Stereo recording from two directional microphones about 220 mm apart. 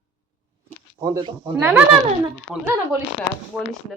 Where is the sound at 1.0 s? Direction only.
15° right (ahead or behind).